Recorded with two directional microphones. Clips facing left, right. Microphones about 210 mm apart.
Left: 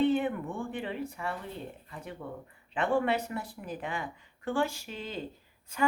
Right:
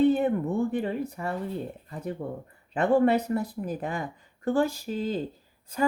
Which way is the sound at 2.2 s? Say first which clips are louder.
Right 6 dB; 45° right (ahead or behind).